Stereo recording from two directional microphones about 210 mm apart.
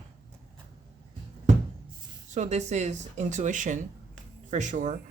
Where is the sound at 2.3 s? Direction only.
35° right (ahead or behind).